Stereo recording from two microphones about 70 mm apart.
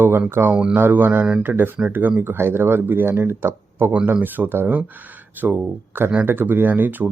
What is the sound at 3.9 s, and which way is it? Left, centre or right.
Speech, centre.